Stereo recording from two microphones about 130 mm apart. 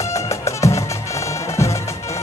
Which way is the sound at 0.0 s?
25° left (ahead or behind).